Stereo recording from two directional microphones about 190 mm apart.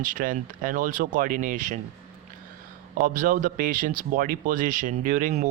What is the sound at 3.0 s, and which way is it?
Speech, 45° right (ahead or behind).